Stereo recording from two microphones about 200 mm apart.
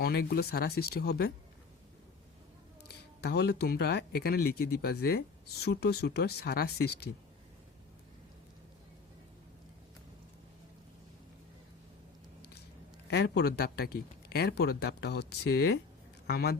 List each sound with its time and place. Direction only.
0.0 s speech: 50° left (ahead or behind)
2.8 s speech: 55° left (ahead or behind)
13.1 s speech: 55° left (ahead or behind)